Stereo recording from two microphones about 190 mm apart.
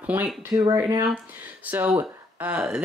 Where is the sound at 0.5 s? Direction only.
20° right (ahead or behind).